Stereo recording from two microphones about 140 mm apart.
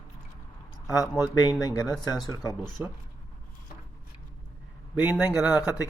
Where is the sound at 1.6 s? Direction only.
25° left (ahead or behind).